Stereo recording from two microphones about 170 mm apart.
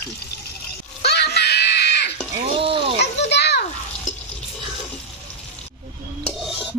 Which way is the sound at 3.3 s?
80° left.